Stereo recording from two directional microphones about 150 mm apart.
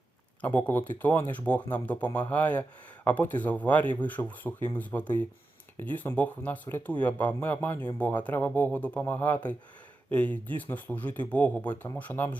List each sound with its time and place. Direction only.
0.4 s speech: 15° left (ahead or behind)